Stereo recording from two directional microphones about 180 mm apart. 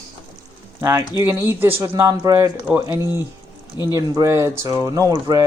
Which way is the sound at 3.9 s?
20° right (ahead or behind).